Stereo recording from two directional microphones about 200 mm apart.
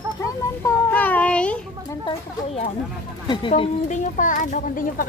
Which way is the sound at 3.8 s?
40° left (ahead or behind).